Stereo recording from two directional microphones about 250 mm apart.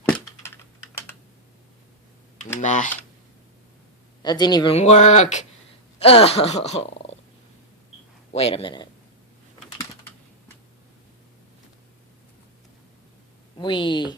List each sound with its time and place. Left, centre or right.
0.0 s computer keyboard: centre
2.6 s speech: left
4.2 s speech: centre
8.3 s speech: left
13.6 s speech: centre